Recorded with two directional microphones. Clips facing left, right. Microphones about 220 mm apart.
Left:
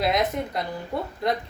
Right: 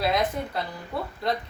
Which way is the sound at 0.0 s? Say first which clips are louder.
Left 1 dB; 20° left (ahead or behind).